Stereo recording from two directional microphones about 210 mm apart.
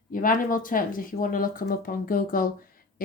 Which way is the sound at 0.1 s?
40° left (ahead or behind).